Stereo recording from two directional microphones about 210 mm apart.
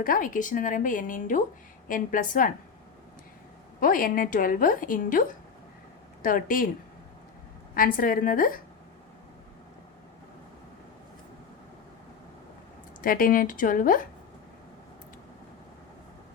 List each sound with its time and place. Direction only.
0.0 s a woman's voice: 40° left (ahead or behind)
3.8 s a woman's voice: 40° left (ahead or behind)
6.2 s a woman's voice: 40° left (ahead or behind)
7.8 s a woman's voice: 40° left (ahead or behind)
13.0 s a woman's voice: 40° left (ahead or behind)